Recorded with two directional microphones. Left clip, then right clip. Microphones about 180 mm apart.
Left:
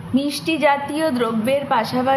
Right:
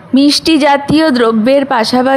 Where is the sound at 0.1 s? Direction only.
60° right (ahead or behind).